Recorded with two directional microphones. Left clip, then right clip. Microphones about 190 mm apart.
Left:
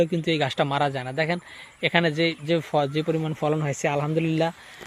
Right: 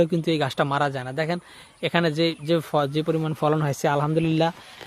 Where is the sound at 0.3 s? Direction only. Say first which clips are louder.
Even; 15° right (ahead or behind).